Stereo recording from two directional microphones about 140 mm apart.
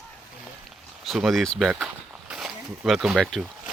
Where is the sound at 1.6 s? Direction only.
5° right (ahead or behind).